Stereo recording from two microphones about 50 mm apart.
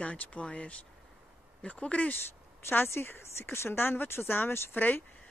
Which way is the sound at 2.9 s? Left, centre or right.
Left.